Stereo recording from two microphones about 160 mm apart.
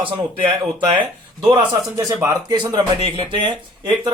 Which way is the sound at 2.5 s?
25° right (ahead or behind).